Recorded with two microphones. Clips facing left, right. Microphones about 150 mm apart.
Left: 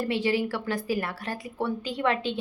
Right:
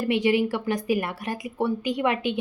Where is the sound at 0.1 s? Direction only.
15° right (ahead or behind).